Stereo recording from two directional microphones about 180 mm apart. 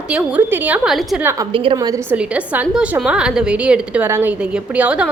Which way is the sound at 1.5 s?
30° right (ahead or behind).